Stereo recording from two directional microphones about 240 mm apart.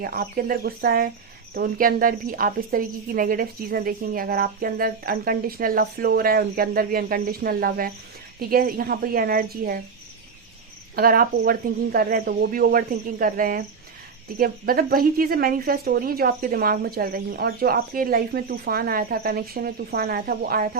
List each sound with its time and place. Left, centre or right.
0.0 s speech: right
10.9 s speech: right